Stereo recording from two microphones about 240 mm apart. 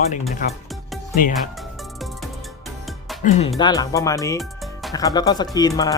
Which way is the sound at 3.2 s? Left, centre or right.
Left.